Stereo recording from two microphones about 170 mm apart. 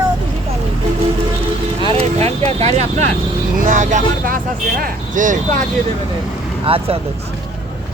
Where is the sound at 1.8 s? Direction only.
35° right (ahead or behind).